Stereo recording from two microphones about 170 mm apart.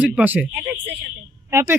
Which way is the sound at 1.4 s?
15° right (ahead or behind).